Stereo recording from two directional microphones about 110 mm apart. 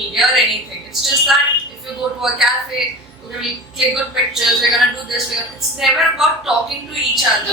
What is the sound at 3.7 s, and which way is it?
Speech, 5° right (ahead or behind).